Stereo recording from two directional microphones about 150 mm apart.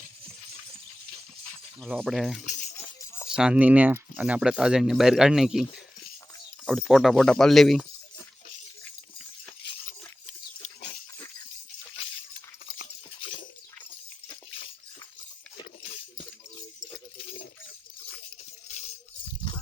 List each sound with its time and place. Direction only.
1.8 s speech: centre (ahead or behind)
2.5 s chink: 55° left (ahead or behind)
3.2 s speech: 5° right (ahead or behind)
6.7 s speech: centre (ahead or behind)